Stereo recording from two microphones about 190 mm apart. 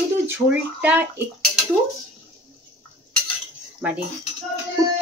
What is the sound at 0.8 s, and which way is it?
Speech, 10° right (ahead or behind).